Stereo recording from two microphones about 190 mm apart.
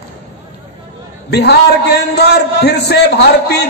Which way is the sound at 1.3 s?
60° left (ahead or behind).